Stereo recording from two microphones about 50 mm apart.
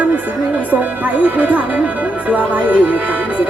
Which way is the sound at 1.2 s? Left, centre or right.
Right.